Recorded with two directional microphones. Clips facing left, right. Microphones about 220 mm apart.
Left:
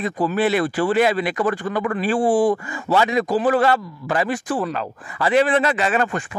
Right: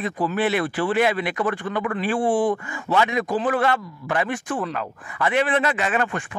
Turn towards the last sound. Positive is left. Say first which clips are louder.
# left 3 dB
turn(degrees=35)  # may be behind; listen again after turning